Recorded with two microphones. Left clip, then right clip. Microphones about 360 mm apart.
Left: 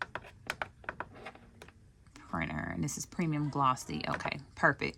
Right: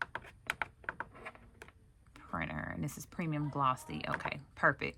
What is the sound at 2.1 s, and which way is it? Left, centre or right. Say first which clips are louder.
Speech: left 2 dB; centre.